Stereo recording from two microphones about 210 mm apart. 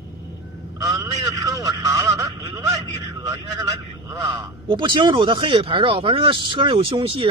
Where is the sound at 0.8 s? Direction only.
15° right (ahead or behind).